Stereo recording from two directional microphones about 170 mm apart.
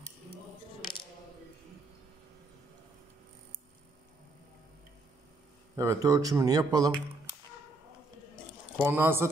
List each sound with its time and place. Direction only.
5.8 s speech: 20° right (ahead or behind)
8.7 s speech: 15° right (ahead or behind)